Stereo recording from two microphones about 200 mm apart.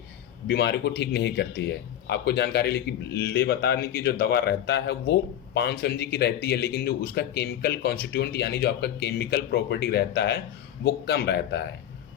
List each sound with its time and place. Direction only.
0.4 s speech: 55° left (ahead or behind)